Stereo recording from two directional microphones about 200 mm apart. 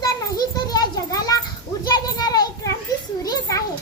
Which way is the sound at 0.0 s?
20° left (ahead or behind).